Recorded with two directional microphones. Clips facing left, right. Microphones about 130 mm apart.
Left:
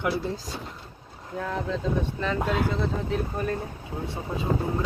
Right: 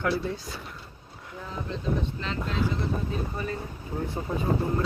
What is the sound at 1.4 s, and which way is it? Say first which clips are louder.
Speech: left 7 dB; 80° left.